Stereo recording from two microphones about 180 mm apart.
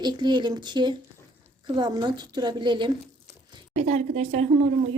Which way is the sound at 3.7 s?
40° right (ahead or behind).